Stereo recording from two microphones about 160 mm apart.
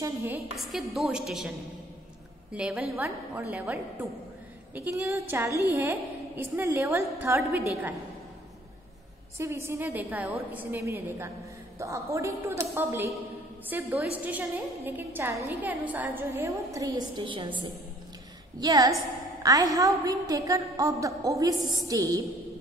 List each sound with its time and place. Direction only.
0.0 s a woman's voice: 15° right (ahead or behind)
0.7 s a woman's voice: centre (ahead or behind)
2.5 s a woman's voice: 5° right (ahead or behind)
9.4 s a woman's voice: 15° right (ahead or behind)